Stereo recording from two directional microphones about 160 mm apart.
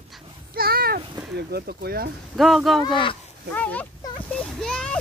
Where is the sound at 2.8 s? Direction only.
30° left (ahead or behind).